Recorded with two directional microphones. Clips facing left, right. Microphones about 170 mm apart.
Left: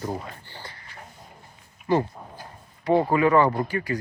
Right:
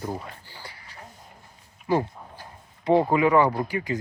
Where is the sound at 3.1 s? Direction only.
15° right (ahead or behind).